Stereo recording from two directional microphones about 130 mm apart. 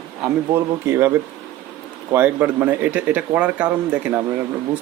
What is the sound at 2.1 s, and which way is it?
Speech, 15° right (ahead or behind).